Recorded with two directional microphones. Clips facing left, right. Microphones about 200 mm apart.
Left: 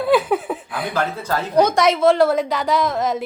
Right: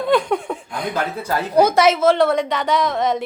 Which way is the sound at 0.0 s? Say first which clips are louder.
Left 1 dB; 5° left (ahead or behind).